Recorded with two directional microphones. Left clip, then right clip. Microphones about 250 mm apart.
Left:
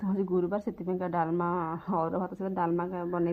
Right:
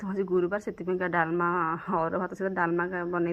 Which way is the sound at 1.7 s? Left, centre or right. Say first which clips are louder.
Right 2 dB; right.